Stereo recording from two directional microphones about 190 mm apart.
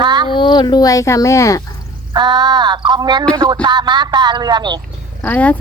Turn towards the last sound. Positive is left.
turn(degrees=10)  # may be behind; listen again after turning